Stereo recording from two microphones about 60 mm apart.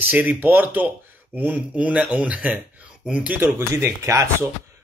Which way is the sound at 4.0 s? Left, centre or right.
Right.